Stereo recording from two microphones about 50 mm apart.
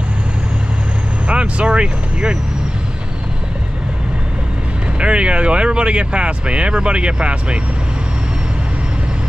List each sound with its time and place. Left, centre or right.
1.2 s speech: right
4.9 s speech: right